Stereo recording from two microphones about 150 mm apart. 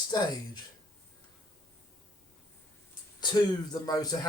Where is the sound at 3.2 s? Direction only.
25° left (ahead or behind).